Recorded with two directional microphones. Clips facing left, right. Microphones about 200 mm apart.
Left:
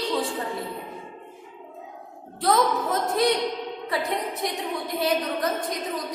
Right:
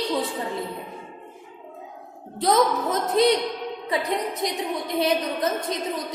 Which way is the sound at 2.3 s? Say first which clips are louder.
Right 2 dB; 20° right (ahead or behind).